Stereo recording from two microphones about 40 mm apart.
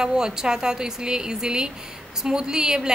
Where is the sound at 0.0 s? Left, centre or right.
Centre.